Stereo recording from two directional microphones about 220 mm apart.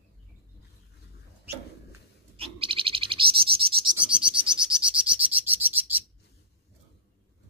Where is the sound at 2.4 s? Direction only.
25° right (ahead or behind).